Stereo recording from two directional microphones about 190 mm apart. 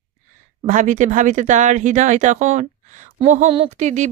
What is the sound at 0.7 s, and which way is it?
Speech, 40° right (ahead or behind).